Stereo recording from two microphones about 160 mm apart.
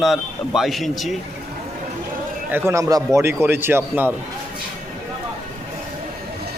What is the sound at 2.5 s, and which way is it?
Speech, 15° right (ahead or behind).